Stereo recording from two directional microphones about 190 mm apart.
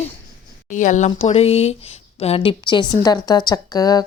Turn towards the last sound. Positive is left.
turn(degrees=20)  # may be behind; listen again after turning